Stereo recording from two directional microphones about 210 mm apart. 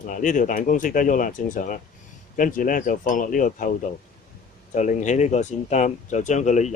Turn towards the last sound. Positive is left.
turn(degrees=35)  # may be behind; listen again after turning